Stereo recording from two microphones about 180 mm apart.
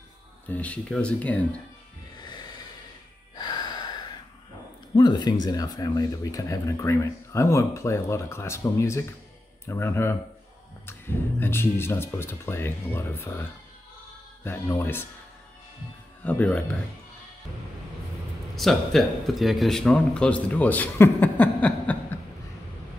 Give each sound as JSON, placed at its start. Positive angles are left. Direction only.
{"t": 0.5, "sound": "speech", "side_deg": 5}
{"t": 2.1, "sound": "music", "side_deg": 25}
{"t": 3.3, "sound": "gasp", "side_deg": 25}
{"t": 4.9, "sound": "speech", "side_deg": 25}
{"t": 14.4, "sound": "speech", "side_deg": 10}
{"t": 16.3, "sound": "speech", "side_deg": 5}
{"t": 18.6, "sound": "speech", "side_deg": 0}